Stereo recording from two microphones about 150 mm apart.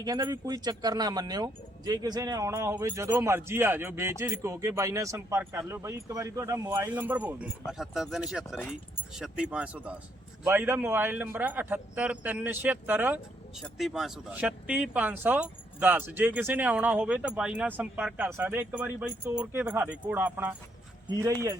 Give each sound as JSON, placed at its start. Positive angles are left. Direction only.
{"t": 0.0, "sound": "speech", "side_deg": -25}
{"t": 13.6, "sound": "speech", "side_deg": 0}